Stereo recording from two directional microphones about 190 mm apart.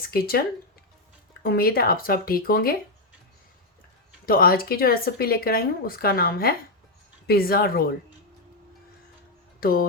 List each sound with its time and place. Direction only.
0.1 s speech: 55° left (ahead or behind)
4.3 s speech: 50° left (ahead or behind)
9.6 s speech: 50° left (ahead or behind)